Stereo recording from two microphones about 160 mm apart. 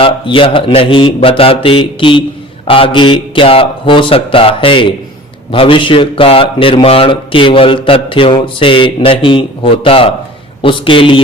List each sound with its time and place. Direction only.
0.0 s a man's voice: 35° left (ahead or behind)